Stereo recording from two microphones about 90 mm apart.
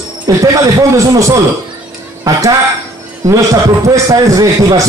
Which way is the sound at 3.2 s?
35° right (ahead or behind).